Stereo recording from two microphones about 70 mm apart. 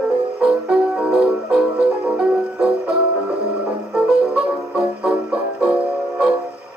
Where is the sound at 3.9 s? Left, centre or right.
Centre.